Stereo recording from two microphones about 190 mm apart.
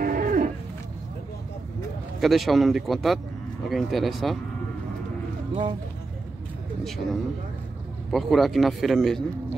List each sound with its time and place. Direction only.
0.0 s livestock: 45° right (ahead or behind)
2.1 s a man's voice: centre (ahead or behind)
5.5 s speech: 25° right (ahead or behind)
6.8 s a man's voice: centre (ahead or behind)